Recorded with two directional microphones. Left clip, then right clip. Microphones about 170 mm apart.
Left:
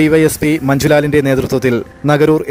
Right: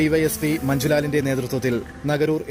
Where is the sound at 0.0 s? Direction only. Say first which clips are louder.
Left 9 dB; 40° left (ahead or behind).